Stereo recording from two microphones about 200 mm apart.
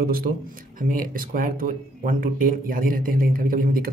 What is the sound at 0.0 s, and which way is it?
Speech, 45° right (ahead or behind).